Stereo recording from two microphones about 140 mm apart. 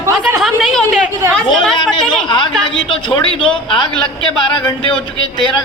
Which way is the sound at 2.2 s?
35° left (ahead or behind).